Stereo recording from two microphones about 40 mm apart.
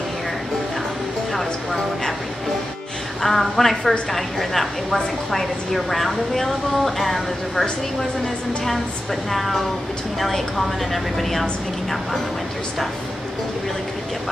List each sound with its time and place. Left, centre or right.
1.3 s a sound: centre
3.2 s a woman's voice: centre
9.3 s a woman's voice: centre
10.9 s a woman's voice: centre